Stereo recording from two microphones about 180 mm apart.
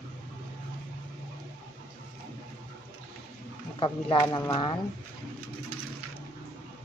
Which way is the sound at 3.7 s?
25° left (ahead or behind).